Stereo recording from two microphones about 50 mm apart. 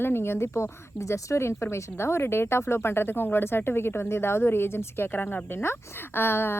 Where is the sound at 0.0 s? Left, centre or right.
Left.